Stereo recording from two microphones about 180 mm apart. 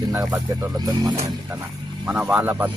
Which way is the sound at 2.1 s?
10° right (ahead or behind).